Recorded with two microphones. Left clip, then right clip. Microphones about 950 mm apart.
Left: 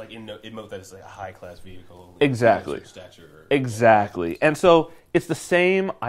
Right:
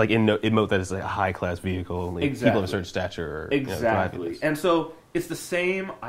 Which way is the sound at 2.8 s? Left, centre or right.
Right.